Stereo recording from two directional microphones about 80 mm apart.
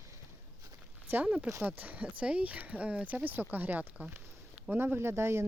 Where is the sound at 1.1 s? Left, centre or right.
Centre.